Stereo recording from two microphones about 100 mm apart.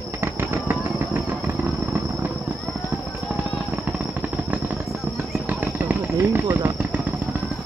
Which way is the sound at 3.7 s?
15° right (ahead or behind).